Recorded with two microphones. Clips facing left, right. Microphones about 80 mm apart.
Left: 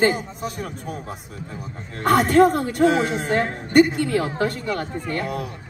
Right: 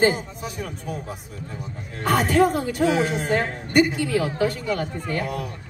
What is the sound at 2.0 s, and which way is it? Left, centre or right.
Speech, left.